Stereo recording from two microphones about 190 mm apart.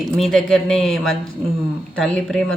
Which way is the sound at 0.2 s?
Centre (ahead or behind).